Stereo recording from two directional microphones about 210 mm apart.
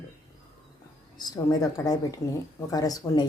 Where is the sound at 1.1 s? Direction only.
20° left (ahead or behind).